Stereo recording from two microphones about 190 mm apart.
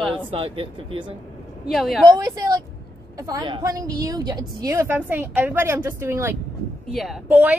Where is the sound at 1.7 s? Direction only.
Centre (ahead or behind).